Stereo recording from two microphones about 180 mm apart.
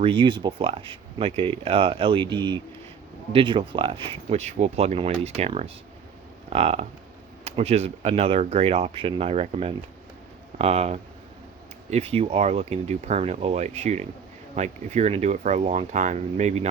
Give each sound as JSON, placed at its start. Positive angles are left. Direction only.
{"t": 0.0, "sound": "speech", "side_deg": -30}